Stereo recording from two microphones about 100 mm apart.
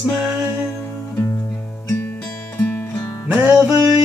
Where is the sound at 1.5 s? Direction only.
15° left (ahead or behind).